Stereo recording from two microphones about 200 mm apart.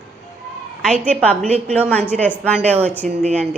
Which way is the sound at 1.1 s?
5° left (ahead or behind).